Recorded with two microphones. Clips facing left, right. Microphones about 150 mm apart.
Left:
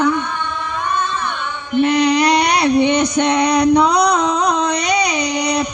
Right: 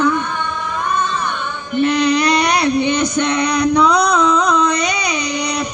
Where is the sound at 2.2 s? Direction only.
70° left (ahead or behind).